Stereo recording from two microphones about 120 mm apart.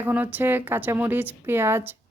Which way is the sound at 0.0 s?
15° right (ahead or behind).